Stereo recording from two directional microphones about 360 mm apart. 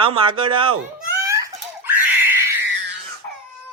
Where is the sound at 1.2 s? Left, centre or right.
Centre.